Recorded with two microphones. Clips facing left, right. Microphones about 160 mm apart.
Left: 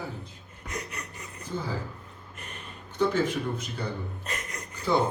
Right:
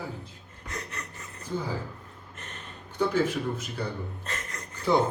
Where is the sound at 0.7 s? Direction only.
15° left (ahead or behind).